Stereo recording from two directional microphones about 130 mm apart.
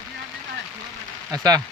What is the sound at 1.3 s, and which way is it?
Speech, 30° right (ahead or behind).